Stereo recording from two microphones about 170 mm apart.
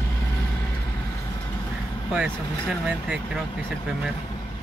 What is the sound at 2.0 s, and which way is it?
Speech, 5° right (ahead or behind).